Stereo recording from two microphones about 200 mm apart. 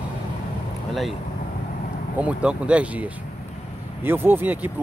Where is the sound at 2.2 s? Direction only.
5° right (ahead or behind).